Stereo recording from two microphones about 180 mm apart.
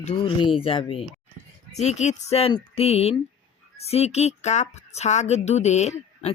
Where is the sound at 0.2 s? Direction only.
25° left (ahead or behind).